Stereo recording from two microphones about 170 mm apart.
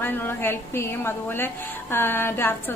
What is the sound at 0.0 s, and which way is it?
Speech, 10° left (ahead or behind).